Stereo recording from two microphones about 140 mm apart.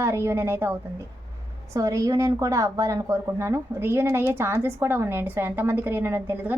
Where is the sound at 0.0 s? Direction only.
20° right (ahead or behind).